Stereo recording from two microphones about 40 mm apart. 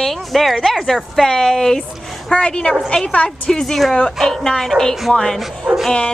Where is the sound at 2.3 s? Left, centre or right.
Left.